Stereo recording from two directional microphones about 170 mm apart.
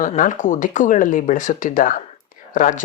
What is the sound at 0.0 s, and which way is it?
Speech, 45° left (ahead or behind).